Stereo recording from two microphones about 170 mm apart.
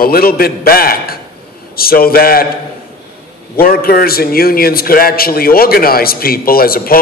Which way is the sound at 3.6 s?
60° left (ahead or behind).